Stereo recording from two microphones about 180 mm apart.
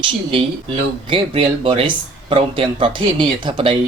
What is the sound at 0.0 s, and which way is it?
Speech, 30° right (ahead or behind).